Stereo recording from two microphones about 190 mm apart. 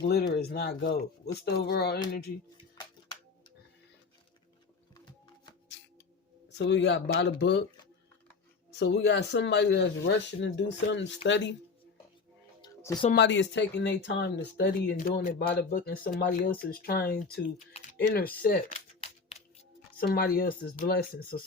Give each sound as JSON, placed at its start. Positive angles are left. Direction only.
{"t": 0.0, "sound": "speech", "side_deg": 60}
{"t": 6.6, "sound": "speech", "side_deg": 70}
{"t": 8.8, "sound": "speech", "side_deg": 60}
{"t": 12.6, "sound": "a sound", "side_deg": 20}
{"t": 13.1, "sound": "speech", "side_deg": 70}
{"t": 18.7, "sound": "a sound", "side_deg": 30}
{"t": 20.0, "sound": "speech", "side_deg": 50}